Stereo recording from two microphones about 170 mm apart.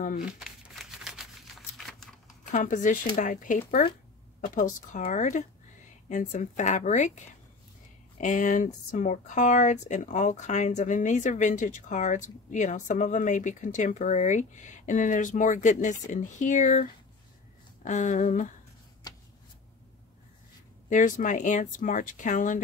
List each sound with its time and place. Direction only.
0.2 s crumpling: 5° right (ahead or behind)
2.5 s speech: 50° left (ahead or behind)
17.8 s speech: 45° left (ahead or behind)
20.9 s speech: 50° left (ahead or behind)